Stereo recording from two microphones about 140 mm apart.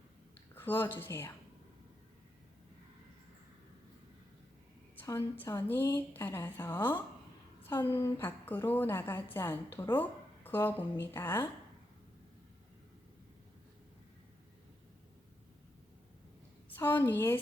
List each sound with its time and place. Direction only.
0.5 s a woman's voice: 15° left (ahead or behind)
4.9 s a woman's voice: 15° left (ahead or behind)
16.6 s a woman's voice: 15° left (ahead or behind)